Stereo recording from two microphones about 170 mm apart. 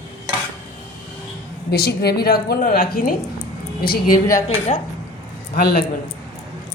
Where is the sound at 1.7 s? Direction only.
70° left (ahead or behind).